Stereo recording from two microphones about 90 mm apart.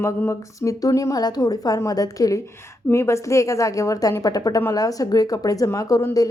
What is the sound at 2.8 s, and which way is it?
A woman's voice, 30° left (ahead or behind).